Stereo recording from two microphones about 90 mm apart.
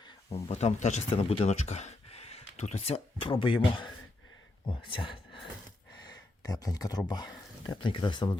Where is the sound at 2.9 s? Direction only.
80° left.